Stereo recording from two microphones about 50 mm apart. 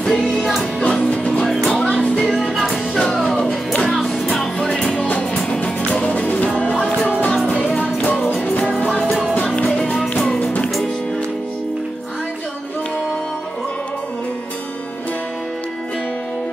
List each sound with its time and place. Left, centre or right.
0.0 s music: centre
0.4 s music: centre
0.8 s music: left
2.5 s music: centre
3.3 s music: centre
3.9 s music: centre
5.0 s music: left
8.4 s music: left
10.2 s music: centre